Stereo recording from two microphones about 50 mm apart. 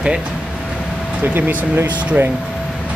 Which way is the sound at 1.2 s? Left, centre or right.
Right.